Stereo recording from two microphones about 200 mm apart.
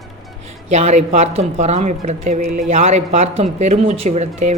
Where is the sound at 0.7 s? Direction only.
35° right (ahead or behind).